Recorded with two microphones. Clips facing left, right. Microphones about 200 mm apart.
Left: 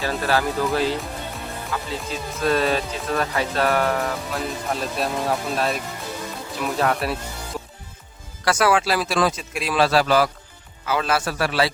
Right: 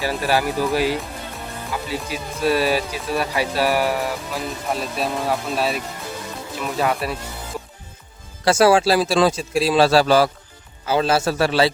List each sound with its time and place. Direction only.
0.0 s speech: 15° right (ahead or behind)
8.4 s a man's voice: 30° right (ahead or behind)